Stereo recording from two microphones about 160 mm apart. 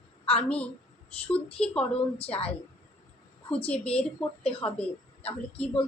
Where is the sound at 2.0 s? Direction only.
40° left (ahead or behind).